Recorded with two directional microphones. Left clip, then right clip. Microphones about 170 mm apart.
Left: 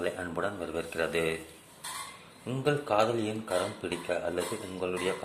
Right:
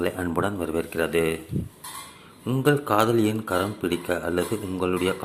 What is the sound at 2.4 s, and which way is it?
Speech, 25° right (ahead or behind).